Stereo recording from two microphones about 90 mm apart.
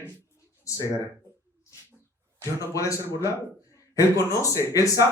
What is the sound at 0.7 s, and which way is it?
Speech, 35° left (ahead or behind).